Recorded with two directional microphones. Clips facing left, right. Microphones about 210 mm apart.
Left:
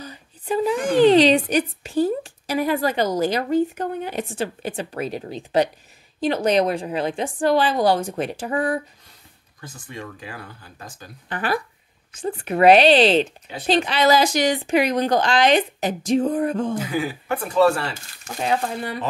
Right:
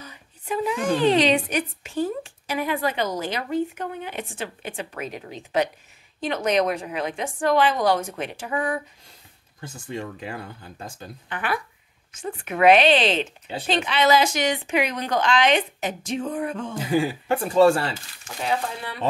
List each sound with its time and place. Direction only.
0.0 s a woman's voice: 35° left (ahead or behind)
9.6 s speech: 25° right (ahead or behind)
11.2 s a woman's voice: 35° left (ahead or behind)
16.7 s speech: 30° right (ahead or behind)
18.2 s speech: 45° left (ahead or behind)